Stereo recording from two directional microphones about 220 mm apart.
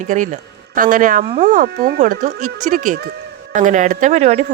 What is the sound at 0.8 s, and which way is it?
Speech, 40° right (ahead or behind).